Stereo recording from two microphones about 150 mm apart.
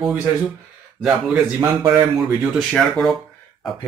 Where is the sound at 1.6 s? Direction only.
25° right (ahead or behind).